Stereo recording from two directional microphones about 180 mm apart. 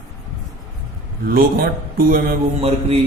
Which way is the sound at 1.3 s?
55° right (ahead or behind).